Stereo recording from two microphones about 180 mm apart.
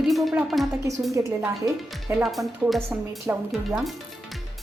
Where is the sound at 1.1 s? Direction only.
15° right (ahead or behind).